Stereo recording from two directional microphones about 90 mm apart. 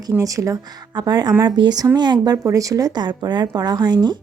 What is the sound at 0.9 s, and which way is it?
Speech, 50° right (ahead or behind).